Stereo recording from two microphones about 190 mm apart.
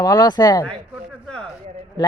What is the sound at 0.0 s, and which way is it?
Speech, 20° left (ahead or behind).